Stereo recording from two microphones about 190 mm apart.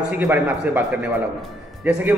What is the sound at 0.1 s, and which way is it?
Speech, 10° right (ahead or behind).